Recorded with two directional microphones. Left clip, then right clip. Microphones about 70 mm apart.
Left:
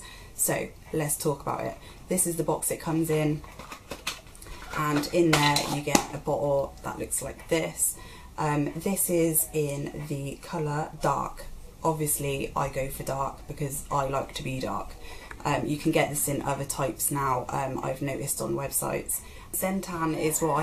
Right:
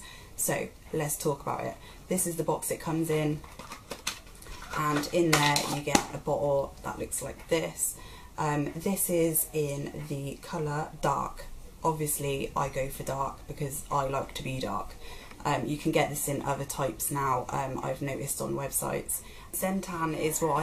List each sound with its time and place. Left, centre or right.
0.5 s speech: centre
5.0 s speech: centre
5.3 s speech: right
6.1 s speech: centre